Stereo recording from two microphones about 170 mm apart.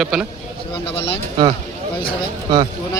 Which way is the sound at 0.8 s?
35° left (ahead or behind).